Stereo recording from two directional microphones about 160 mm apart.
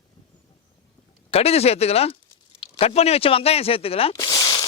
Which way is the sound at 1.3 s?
40° left (ahead or behind).